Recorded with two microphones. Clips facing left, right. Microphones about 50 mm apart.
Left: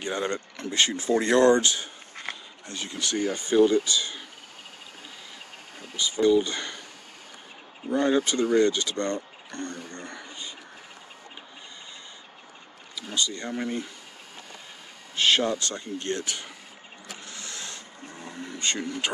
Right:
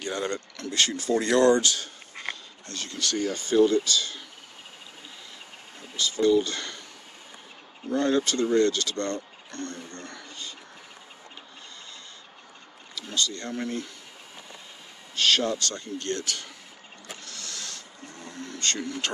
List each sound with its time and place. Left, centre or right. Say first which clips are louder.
0.0 s speech: left 1 dB; left
5.9 s speech: left 1 dB; centre
7.9 s speech: left 1 dB; centre
12.9 s speech: even; centre
15.1 s speech: left 1 dB; left
17.2 s a sound: left 2 dB; centre